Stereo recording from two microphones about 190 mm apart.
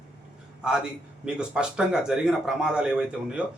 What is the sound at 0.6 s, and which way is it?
Speech, 5° right (ahead or behind).